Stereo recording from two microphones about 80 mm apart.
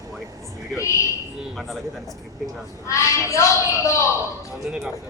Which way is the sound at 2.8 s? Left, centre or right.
Left.